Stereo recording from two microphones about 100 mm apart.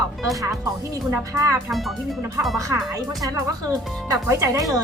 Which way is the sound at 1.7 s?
Centre (ahead or behind).